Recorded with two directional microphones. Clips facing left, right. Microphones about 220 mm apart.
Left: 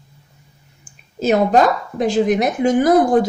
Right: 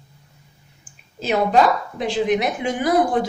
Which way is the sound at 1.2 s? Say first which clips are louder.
Left 3 dB; 45° left (ahead or behind).